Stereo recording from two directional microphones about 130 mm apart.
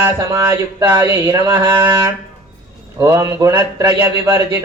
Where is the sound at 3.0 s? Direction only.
20° right (ahead or behind).